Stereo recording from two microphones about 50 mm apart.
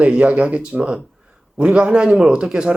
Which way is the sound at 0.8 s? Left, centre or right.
Centre.